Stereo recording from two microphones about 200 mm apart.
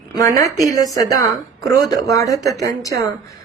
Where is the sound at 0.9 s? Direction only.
15° left (ahead or behind).